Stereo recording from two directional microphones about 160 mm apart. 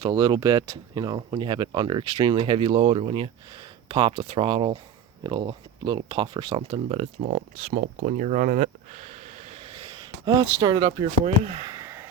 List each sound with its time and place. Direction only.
0.0 s speech: 25° right (ahead or behind); by 7.1 s 40° right (ahead or behind)
7.2 s speech: 55° right (ahead or behind); by 11.1 s 25° right (ahead or behind)
11.6 s a sound: 20° right (ahead or behind)